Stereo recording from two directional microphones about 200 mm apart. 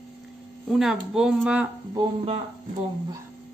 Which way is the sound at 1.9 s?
25° right (ahead or behind).